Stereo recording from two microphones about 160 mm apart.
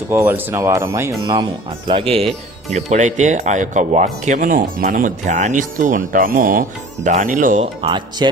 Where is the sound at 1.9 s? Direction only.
35° right (ahead or behind).